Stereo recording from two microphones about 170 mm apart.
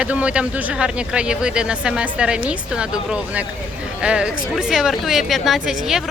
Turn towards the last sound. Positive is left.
turn(degrees=0)  # may be behind; listen again after turning